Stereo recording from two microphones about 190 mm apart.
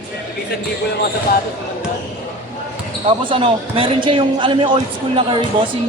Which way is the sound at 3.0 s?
30° right (ahead or behind).